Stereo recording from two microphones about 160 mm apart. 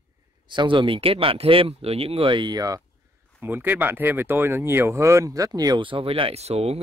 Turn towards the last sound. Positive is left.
turn(degrees=-40)  # may be behind; listen again after turning